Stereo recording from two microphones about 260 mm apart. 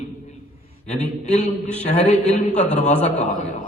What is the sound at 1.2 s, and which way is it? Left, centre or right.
A man's voice, left.